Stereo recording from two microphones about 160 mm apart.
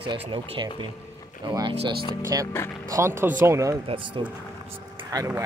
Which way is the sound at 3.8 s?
30° right (ahead or behind).